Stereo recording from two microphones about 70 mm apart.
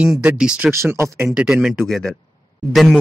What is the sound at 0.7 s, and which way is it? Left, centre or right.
Speech, right.